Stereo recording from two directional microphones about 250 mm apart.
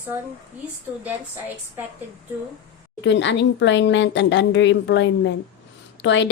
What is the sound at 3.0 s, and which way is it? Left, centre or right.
A woman's voice, left.